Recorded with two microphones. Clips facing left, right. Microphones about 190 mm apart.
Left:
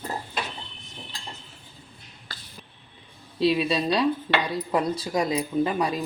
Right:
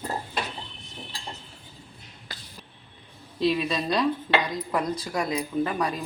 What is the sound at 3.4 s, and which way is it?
Speech, 10° left (ahead or behind).